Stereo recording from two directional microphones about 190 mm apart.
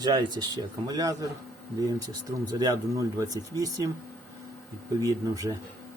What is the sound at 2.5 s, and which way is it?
Speech, 20° right (ahead or behind).